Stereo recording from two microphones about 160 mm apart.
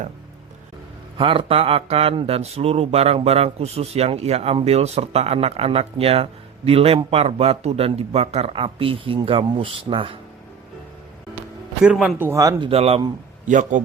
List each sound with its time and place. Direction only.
1.2 s speech: 35° right (ahead or behind)
11.8 s speech: 5° right (ahead or behind)
12.2 s speech: 20° right (ahead or behind)
12.6 s speech: 40° right (ahead or behind)
13.5 s a man's voice: 50° right (ahead or behind)